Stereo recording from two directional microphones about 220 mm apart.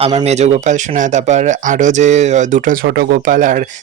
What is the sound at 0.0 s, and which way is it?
Speech, 25° right (ahead or behind).